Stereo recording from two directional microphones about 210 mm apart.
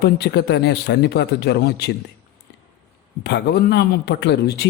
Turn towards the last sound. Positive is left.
turn(degrees=50)  # may be behind; listen again after turning